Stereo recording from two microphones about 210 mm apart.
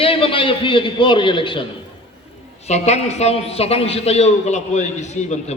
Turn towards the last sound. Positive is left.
turn(degrees=35)  # may be behind; listen again after turning